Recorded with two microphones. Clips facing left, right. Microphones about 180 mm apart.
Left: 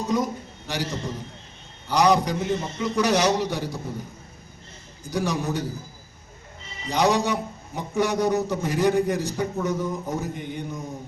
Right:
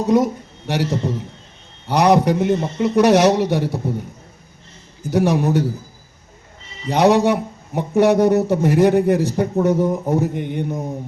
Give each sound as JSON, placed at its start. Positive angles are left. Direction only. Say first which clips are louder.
{"t": 0.0, "sound": "a man's voice", "louder": "right 8 dB", "side_deg": -65}
{"t": 5.1, "sound": "a man's voice", "louder": "right 9 dB", "side_deg": -65}
{"t": 6.8, "sound": "a man's voice", "louder": "right 7 dB", "side_deg": -65}